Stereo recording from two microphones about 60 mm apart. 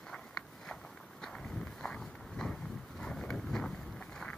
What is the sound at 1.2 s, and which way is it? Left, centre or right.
Walk, centre.